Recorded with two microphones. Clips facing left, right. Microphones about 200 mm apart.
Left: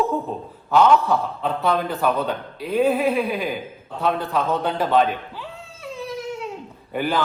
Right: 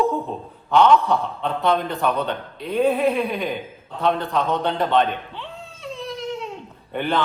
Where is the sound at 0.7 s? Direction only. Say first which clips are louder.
Even; 5° left (ahead or behind).